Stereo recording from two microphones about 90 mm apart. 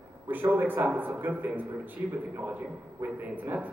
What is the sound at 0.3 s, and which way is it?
A man's voice, 20° right (ahead or behind).